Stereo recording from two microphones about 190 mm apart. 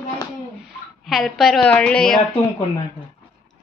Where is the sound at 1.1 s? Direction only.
Centre (ahead or behind).